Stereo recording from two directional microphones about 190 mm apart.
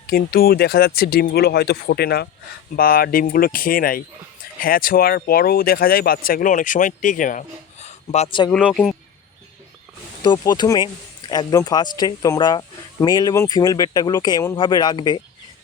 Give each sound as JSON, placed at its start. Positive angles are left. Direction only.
{"t": 0.1, "sound": "speech", "side_deg": 50}
{"t": 8.4, "sound": "speech", "side_deg": 5}
{"t": 10.2, "sound": "speech", "side_deg": 20}